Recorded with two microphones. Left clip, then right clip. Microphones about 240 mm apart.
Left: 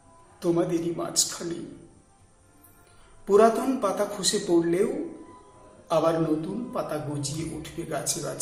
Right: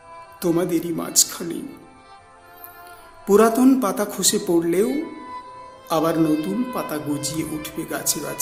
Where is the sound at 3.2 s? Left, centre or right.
Right.